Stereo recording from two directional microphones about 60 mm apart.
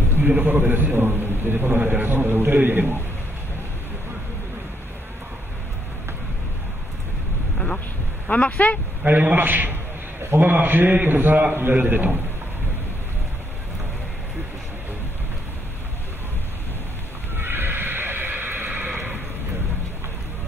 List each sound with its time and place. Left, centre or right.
0.3 s a man's voice: right
7.5 s vehicle: centre
8.3 s speech: left
9.0 s a man's voice: right
17.4 s neigh: right